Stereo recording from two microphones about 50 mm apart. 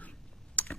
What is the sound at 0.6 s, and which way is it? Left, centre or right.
Computer keyboard, left.